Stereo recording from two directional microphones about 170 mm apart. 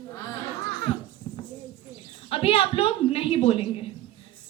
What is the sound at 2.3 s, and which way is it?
A woman's voice, 35° left (ahead or behind).